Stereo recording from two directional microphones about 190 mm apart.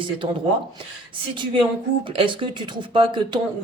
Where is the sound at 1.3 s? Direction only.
25° right (ahead or behind).